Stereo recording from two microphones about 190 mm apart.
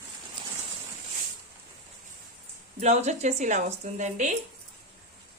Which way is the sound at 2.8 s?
35° right (ahead or behind).